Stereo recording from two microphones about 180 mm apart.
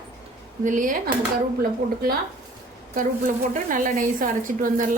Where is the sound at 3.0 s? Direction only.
50° right (ahead or behind).